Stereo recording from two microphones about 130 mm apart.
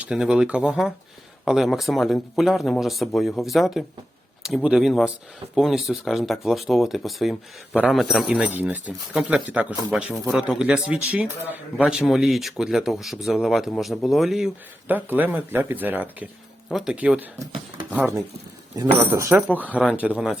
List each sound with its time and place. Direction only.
0.0 s speech: 5° right (ahead or behind)
14.8 s speech: 15° right (ahead or behind)
17.4 s speech: 35° right (ahead or behind)
18.9 s speech: 20° right (ahead or behind)